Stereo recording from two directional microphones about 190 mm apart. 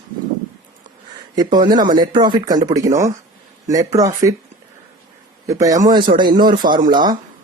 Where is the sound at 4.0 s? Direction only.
15° right (ahead or behind).